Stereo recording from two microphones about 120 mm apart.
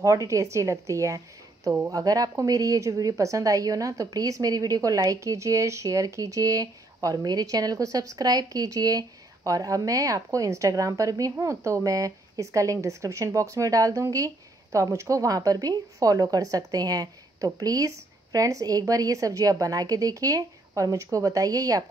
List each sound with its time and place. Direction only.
0.0 s a woman's voice: 25° right (ahead or behind)